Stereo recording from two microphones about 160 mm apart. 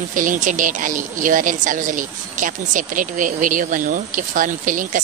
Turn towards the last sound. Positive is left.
turn(degrees=-55)  # may be behind; listen again after turning